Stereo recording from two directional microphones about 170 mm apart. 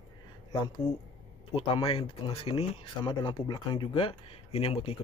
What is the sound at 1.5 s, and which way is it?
Speech, 35° left (ahead or behind).